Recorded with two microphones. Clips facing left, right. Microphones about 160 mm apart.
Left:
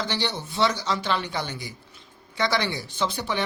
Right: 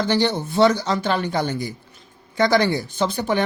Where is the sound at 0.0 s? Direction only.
50° right (ahead or behind).